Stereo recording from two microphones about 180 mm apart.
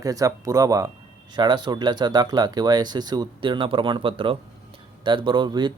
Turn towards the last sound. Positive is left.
turn(degrees=-25)  # may be behind; listen again after turning